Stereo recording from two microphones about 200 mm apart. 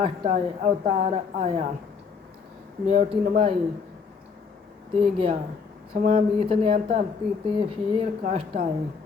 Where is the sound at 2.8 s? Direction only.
30° right (ahead or behind).